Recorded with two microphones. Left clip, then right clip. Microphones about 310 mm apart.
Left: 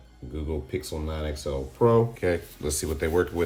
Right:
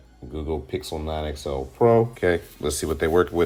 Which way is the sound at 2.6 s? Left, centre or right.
Centre.